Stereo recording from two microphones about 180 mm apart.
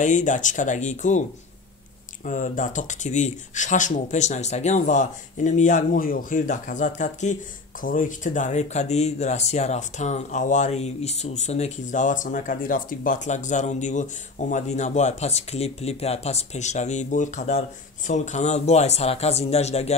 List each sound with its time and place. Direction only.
0.0 s speech: 45° left (ahead or behind)
2.2 s speech: 45° left (ahead or behind)